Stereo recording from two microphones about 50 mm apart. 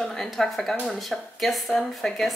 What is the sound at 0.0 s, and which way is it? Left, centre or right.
A woman's voice, centre.